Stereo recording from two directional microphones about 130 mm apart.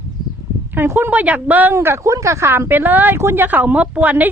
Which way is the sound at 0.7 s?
15° right (ahead or behind).